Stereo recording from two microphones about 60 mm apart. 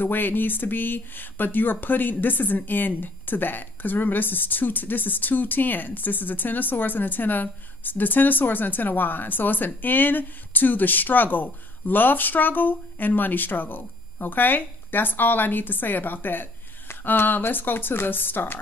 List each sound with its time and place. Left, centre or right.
0.0 s speech: left